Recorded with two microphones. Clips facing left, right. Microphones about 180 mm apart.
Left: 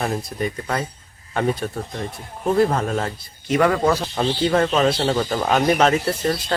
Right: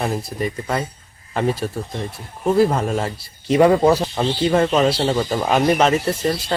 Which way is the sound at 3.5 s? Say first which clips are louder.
Right 4 dB; 25° right (ahead or behind).